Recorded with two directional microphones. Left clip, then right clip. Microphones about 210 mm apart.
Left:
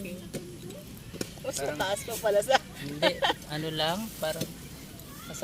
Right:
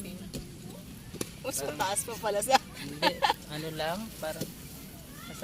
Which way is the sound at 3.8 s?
50° left (ahead or behind).